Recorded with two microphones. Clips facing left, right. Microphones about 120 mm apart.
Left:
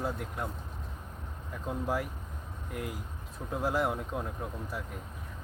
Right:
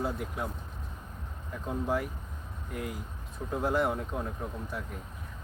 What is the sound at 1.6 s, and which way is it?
Speech, centre (ahead or behind).